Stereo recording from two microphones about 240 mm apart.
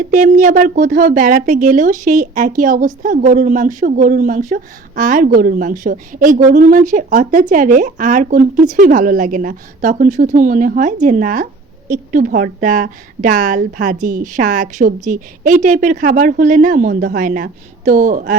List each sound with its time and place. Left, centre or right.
0.0 s a woman's voice: right